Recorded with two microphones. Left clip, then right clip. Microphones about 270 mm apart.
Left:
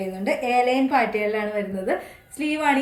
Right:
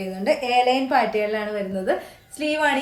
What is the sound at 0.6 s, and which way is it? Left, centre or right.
Speech, centre.